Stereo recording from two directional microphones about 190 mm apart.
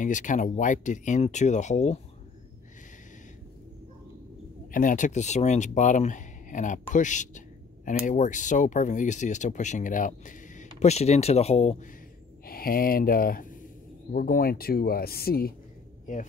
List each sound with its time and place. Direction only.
0.0 s speech: 40° left (ahead or behind)
4.6 s speech: 45° left (ahead or behind)
12.4 s speech: 50° left (ahead or behind)